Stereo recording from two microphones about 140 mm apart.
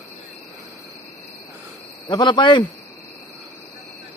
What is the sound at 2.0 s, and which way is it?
Speech, 30° left (ahead or behind).